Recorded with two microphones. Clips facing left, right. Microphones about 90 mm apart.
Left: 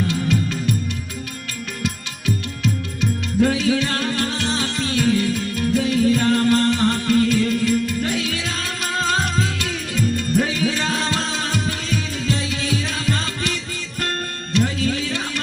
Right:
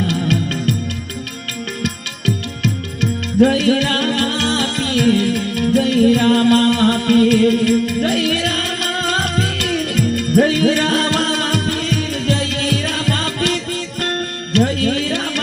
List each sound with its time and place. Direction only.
0.1 s music: 65° right (ahead or behind)
3.4 s music: 55° right (ahead or behind)